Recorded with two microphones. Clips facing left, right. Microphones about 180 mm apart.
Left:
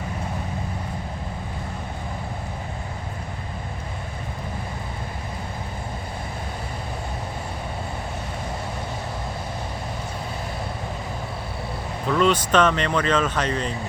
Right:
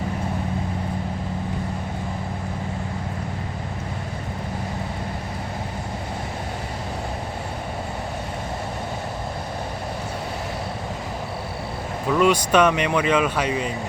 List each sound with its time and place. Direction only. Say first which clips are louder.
12.0 s speech: right 1 dB; 10° right (ahead or behind)